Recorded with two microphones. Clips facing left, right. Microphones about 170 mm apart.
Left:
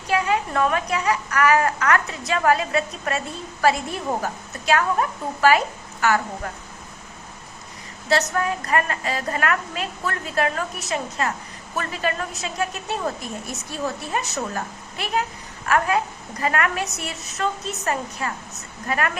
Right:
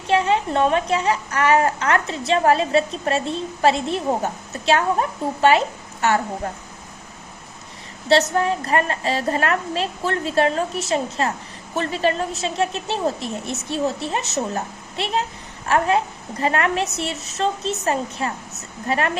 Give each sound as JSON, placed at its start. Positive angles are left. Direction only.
{"t": 0.1, "sound": "a woman's voice", "side_deg": -25}
{"t": 8.0, "sound": "a woman's voice", "side_deg": -30}